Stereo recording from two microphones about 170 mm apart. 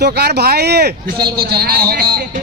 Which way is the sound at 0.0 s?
75° right (ahead or behind).